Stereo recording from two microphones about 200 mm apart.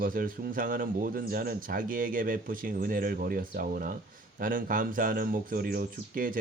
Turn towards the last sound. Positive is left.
turn(degrees=-45)  # may be behind; listen again after turning